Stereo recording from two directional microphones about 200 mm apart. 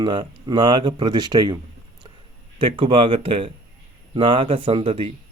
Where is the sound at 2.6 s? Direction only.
25° right (ahead or behind).